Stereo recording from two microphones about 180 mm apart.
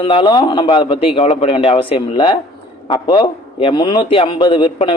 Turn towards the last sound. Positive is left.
turn(degrees=30)  # may be behind; listen again after turning